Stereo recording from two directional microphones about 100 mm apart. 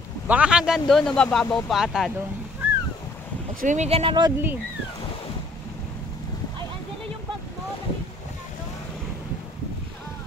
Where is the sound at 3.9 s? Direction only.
75° right (ahead or behind).